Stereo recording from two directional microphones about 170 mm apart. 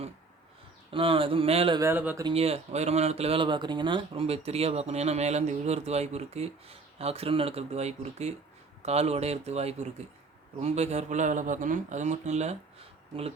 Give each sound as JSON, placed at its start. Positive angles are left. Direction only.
{"t": 0.9, "sound": "speech", "side_deg": -30}
{"t": 1.8, "sound": "speech", "side_deg": -10}
{"t": 2.2, "sound": "speech", "side_deg": -35}